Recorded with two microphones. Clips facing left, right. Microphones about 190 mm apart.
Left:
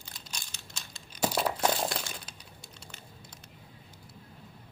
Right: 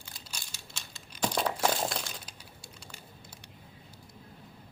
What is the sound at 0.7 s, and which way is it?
Crumpling, 5° left (ahead or behind).